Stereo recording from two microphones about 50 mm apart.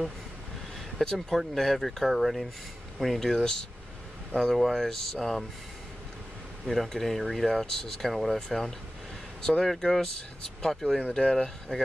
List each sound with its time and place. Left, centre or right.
0.9 s speech: centre
6.6 s speech: centre
11.0 s speech: centre